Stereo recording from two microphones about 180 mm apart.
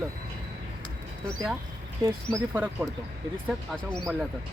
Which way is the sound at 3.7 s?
5° left (ahead or behind).